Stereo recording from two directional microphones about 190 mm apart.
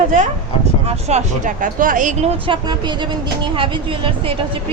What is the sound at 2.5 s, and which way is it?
Speech, 25° right (ahead or behind).